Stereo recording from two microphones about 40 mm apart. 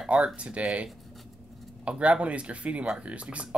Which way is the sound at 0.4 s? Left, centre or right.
Right.